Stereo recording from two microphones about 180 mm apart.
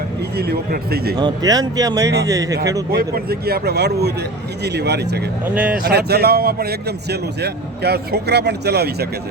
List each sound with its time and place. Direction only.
0.3 s a man's voice: 60° right (ahead or behind)
1.1 s speech: 20° right (ahead or behind)
2.9 s a man's voice: 60° right (ahead or behind)
5.5 s speech: 5° right (ahead or behind)
5.8 s a man's voice: 65° right (ahead or behind)